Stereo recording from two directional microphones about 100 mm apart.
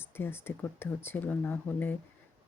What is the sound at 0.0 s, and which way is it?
Speech, 20° left (ahead or behind).